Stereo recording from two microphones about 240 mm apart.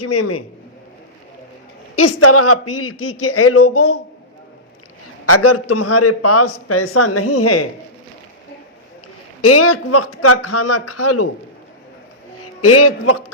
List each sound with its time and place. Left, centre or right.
0.0 s a man's voice: left
2.0 s a man's voice: left
5.2 s a man's voice: left
9.4 s a man's voice: left
12.6 s speech: left